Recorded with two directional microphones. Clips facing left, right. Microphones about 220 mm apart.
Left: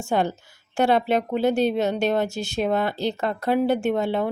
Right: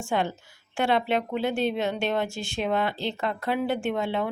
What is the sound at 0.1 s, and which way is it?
Speech, 40° left (ahead or behind).